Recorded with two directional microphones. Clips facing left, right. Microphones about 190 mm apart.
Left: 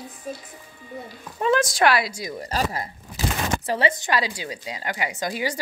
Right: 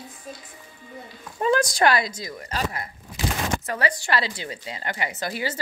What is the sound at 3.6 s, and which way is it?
A woman's voice, 25° left (ahead or behind).